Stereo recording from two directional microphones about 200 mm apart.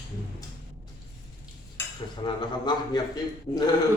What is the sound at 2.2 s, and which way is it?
A man's voice, 20° left (ahead or behind).